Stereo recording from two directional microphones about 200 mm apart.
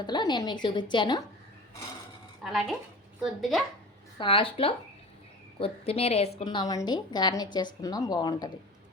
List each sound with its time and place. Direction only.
0.0 s a woman's voice: 20° left (ahead or behind)
2.4 s speech: centre (ahead or behind)
4.2 s a woman's voice: 25° left (ahead or behind)